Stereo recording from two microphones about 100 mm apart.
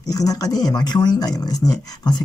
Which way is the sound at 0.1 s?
35° left (ahead or behind).